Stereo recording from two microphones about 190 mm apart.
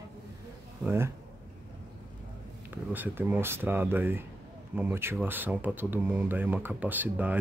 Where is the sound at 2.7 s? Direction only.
10° right (ahead or behind).